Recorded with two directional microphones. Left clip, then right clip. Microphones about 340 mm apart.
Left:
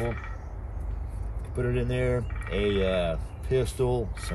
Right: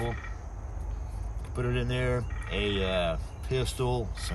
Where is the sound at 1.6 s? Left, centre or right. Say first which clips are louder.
Left 3 dB; centre.